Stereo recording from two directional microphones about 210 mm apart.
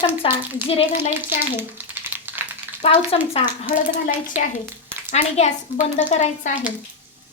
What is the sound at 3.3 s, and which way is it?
A woman's voice, 40° left (ahead or behind).